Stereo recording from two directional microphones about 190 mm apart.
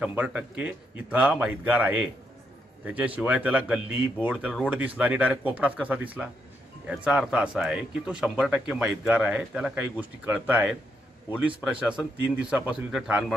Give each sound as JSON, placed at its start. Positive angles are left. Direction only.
{"t": 0.0, "sound": "a man's voice", "side_deg": -5}